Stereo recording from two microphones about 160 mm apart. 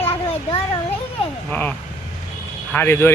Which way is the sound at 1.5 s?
10° left (ahead or behind).